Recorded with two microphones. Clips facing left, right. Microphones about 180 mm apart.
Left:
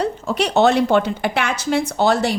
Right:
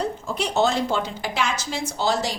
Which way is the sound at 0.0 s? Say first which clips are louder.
Left 6 dB; 70° left (ahead or behind).